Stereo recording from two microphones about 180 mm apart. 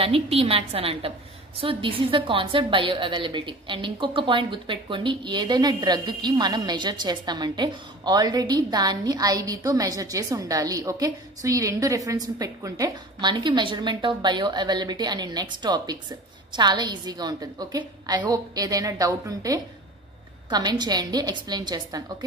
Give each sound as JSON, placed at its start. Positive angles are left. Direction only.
{"t": 0.0, "sound": "a woman's voice", "side_deg": -30}